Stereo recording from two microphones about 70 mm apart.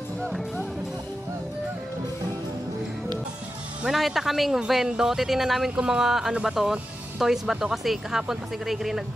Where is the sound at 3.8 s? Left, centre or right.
Centre.